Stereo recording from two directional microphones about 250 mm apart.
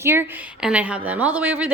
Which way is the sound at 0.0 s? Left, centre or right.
Centre.